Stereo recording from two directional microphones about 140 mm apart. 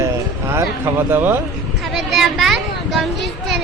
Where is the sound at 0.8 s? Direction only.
15° right (ahead or behind).